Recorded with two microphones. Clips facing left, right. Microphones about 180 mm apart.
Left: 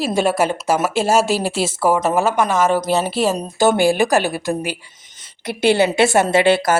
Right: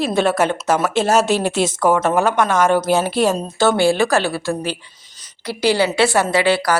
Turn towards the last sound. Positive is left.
turn(degrees=25)  # may be behind; listen again after turning